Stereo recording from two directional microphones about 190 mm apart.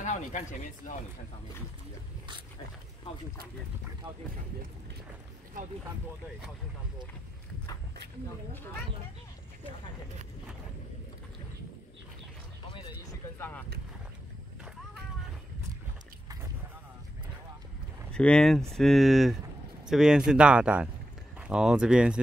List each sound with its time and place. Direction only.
0.0 s speech: 40° left (ahead or behind)
5.5 s speech: 45° right (ahead or behind)
13.1 s speech: 10° left (ahead or behind)
18.1 s speech: 5° left (ahead or behind)